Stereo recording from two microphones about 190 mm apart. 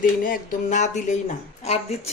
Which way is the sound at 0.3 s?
40° left (ahead or behind).